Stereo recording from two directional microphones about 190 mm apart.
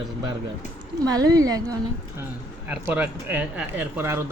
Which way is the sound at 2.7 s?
10° right (ahead or behind).